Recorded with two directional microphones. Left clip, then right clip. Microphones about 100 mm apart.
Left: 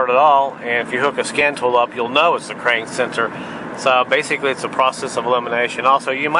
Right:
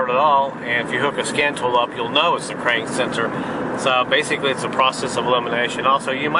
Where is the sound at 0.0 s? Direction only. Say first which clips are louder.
Left 3 dB; 25° left (ahead or behind).